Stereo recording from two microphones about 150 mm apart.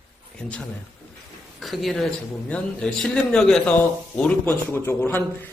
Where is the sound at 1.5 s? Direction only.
Centre (ahead or behind).